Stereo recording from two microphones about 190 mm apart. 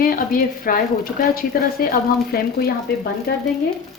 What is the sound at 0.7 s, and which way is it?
A woman's voice, 50° left (ahead or behind).